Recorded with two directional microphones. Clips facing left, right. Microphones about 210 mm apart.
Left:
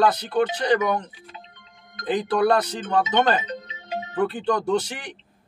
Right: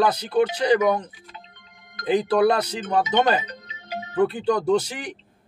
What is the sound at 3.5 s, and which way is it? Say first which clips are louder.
Music: left 4 dB; 25° left (ahead or behind).